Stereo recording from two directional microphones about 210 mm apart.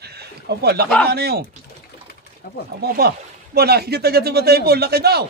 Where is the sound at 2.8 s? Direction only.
50° right (ahead or behind).